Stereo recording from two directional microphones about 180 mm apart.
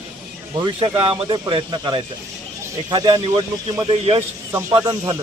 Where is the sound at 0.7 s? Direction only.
30° right (ahead or behind).